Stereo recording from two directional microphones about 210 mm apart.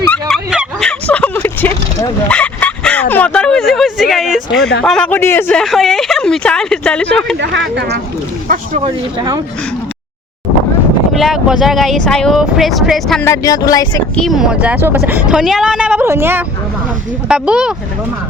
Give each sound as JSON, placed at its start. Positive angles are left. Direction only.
{"t": 0.1, "sound": "a sound", "side_deg": 0}
{"t": 2.3, "sound": "bow-wow", "side_deg": 5}
{"t": 4.8, "sound": "speech", "side_deg": 5}
{"t": 8.4, "sound": "speech", "side_deg": -35}
{"t": 11.2, "sound": "speech", "side_deg": 0}
{"t": 13.2, "sound": "a sound", "side_deg": 15}
{"t": 14.2, "sound": "speech", "side_deg": 0}